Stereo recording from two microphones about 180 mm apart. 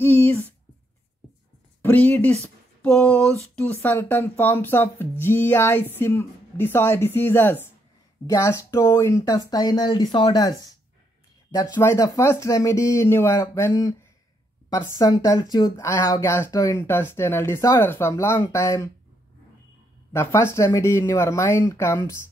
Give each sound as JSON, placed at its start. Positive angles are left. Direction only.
{"t": 0.0, "sound": "speech", "side_deg": 10}
{"t": 1.8, "sound": "speech", "side_deg": 10}
{"t": 2.4, "sound": "a sound", "side_deg": 10}
{"t": 3.5, "sound": "speech", "side_deg": 10}
{"t": 20.1, "sound": "speech", "side_deg": 15}